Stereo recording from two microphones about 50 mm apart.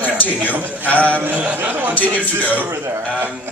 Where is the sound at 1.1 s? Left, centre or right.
Right.